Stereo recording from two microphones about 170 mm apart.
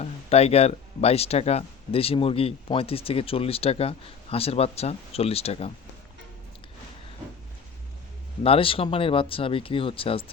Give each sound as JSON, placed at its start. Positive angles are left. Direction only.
{"t": 0.0, "sound": "speech", "side_deg": 40}
{"t": 8.4, "sound": "speech", "side_deg": 30}